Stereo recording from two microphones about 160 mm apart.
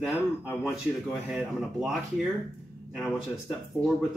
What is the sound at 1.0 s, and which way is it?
Speech, 5° right (ahead or behind).